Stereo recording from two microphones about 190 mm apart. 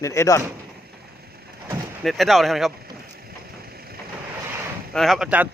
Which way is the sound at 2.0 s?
Centre (ahead or behind).